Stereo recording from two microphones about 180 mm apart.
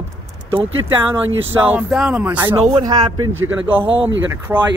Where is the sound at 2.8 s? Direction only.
25° right (ahead or behind).